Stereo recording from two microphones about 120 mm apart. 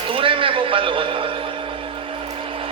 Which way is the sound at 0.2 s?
45° right (ahead or behind).